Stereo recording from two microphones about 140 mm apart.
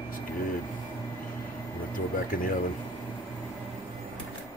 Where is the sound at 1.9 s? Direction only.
75° left (ahead or behind).